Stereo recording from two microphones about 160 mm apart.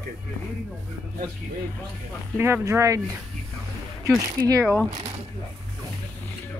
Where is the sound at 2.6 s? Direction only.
20° right (ahead or behind).